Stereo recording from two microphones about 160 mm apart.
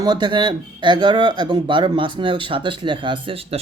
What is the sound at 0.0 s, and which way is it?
A man's voice, 25° right (ahead or behind).